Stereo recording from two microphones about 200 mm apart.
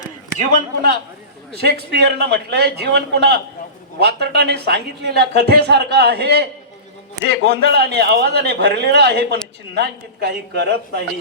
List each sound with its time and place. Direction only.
0.5 s a man's voice: 50° right (ahead or behind)